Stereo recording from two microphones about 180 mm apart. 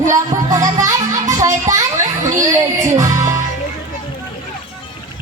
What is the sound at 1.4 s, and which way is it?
Children playing, 15° right (ahead or behind).